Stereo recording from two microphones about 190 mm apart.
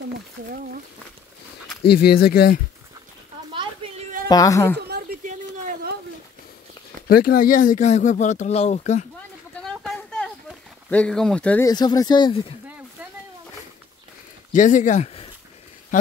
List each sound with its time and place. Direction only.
1.9 s speech: 55° left (ahead or behind)
3.8 s children playing: 25° right (ahead or behind)
4.3 s speech: 20° left (ahead or behind)
4.7 s a sound: 55° right (ahead or behind)
7.1 s speech: 50° left (ahead or behind)
9.6 s a sound: centre (ahead or behind)
10.9 s speech: 5° left (ahead or behind)
11.6 s speech: 20° left (ahead or behind)
14.5 s speech: 40° left (ahead or behind)